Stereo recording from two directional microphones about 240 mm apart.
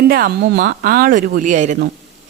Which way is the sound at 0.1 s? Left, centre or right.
Right.